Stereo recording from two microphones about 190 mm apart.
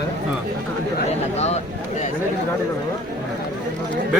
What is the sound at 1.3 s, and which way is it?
Speech, 35° left (ahead or behind).